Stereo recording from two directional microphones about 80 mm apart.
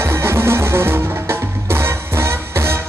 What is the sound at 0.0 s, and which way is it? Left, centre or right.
Music, right.